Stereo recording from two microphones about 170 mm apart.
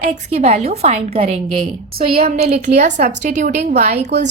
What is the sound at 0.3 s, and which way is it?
A woman's voice, 35° right (ahead or behind).